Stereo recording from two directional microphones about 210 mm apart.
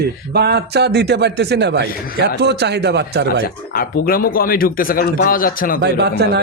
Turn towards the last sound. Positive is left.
turn(degrees=-50)  # may be behind; listen again after turning